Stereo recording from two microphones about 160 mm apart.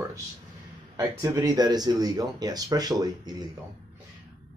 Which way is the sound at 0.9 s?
20° right (ahead or behind).